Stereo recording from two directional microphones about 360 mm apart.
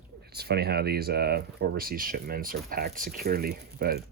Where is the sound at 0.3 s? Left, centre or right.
Right.